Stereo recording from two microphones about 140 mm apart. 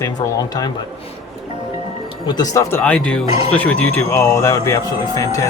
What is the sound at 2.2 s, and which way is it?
Speech, 30° left (ahead or behind).